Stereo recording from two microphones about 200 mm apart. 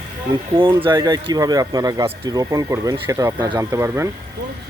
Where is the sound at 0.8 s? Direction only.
20° right (ahead or behind).